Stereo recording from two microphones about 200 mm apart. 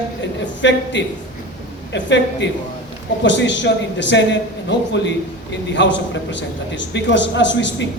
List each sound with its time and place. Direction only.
0.2 s a man's voice: 65° left (ahead or behind)